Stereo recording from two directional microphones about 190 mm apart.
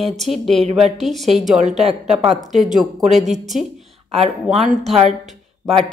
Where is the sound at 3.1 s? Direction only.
35° right (ahead or behind).